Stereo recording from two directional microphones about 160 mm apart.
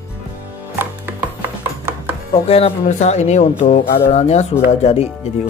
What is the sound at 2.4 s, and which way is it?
Speech, 35° left (ahead or behind).